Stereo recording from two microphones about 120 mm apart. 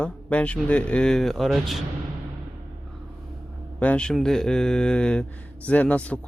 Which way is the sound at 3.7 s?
10° left (ahead or behind).